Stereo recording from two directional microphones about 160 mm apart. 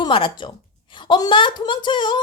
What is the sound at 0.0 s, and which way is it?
A woman's voice, 30° left (ahead or behind).